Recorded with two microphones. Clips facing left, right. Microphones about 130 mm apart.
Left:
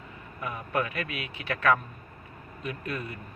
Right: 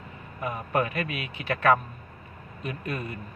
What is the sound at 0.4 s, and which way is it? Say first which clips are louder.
A man's voice: right 3 dB; 40° right (ahead or behind).